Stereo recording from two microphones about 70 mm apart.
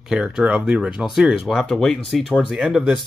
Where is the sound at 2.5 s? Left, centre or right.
Centre.